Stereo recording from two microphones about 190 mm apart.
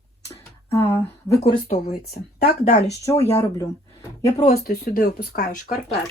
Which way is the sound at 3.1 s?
35° left (ahead or behind).